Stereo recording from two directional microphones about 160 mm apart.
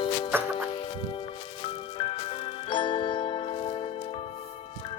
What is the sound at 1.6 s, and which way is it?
Music, 35° left (ahead or behind).